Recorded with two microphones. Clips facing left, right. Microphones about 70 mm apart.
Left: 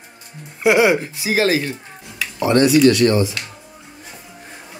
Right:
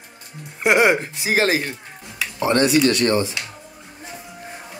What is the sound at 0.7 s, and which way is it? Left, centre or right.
Speech, right.